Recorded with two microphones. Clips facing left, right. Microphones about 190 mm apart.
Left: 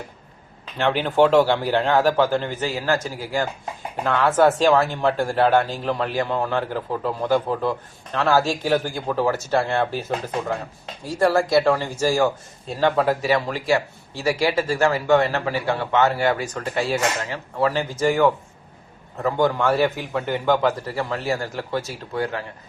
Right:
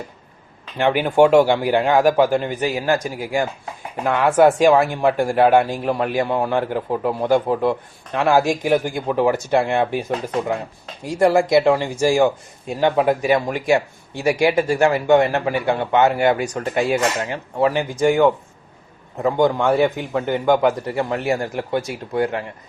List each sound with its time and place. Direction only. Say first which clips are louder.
0.8 s speech: right 3 dB; 15° right (ahead or behind)
11.0 s speech: right 3 dB; 15° right (ahead or behind)